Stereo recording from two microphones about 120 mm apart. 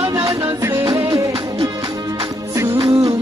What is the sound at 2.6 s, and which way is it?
Music, 25° right (ahead or behind).